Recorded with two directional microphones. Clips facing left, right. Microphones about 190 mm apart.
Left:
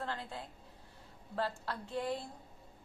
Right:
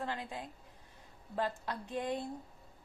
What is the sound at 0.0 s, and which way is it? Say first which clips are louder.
A woman's voice: right 2 dB; 15° right (ahead or behind).